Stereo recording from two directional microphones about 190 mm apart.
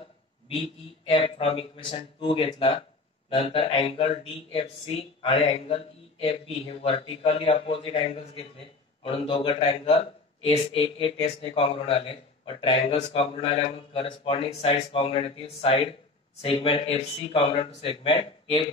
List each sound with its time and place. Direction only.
0.6 s a man's voice: 30° left (ahead or behind)